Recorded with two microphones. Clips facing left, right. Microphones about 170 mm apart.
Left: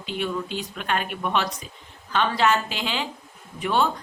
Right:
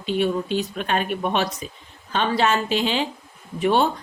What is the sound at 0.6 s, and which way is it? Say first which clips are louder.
Speech: right 4 dB; 25° right (ahead or behind).